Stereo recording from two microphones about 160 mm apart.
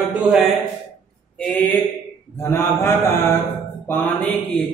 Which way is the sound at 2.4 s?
15° left (ahead or behind).